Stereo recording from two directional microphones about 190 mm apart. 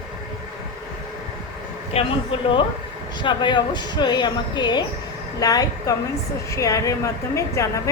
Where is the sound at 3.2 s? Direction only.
25° left (ahead or behind).